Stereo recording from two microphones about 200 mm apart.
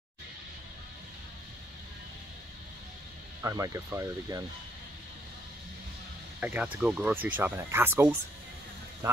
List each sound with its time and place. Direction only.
3.4 s speech: 15° right (ahead or behind)
6.4 s speech: 5° right (ahead or behind)